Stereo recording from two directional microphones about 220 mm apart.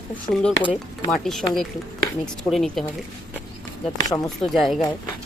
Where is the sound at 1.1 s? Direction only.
Centre (ahead or behind).